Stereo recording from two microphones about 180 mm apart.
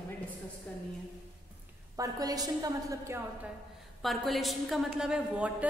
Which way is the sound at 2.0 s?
20° right (ahead or behind).